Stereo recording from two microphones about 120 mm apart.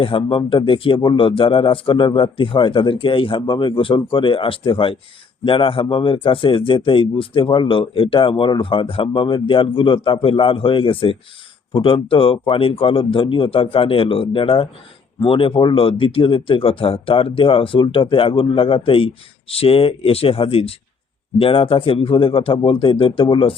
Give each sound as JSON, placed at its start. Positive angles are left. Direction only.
{"t": 0.0, "sound": "speech", "side_deg": 45}